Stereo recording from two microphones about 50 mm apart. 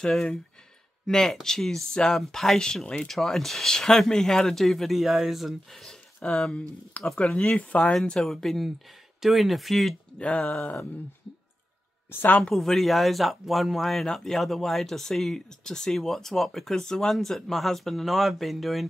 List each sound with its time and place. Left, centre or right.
0.1 s speech: centre
7.5 s a sound: left
7.9 s speech: centre
10.1 s a sound: left
12.1 s a woman's voice: left
12.4 s speech: centre